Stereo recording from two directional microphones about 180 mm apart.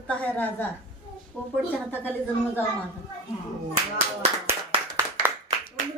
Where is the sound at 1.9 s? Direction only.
10° left (ahead or behind).